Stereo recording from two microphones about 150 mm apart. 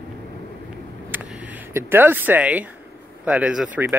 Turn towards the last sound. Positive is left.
turn(degrees=-10)  # may be behind; listen again after turning